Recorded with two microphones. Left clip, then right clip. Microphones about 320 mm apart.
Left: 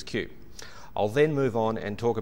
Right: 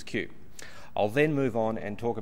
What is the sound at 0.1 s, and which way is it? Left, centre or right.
Speech, left.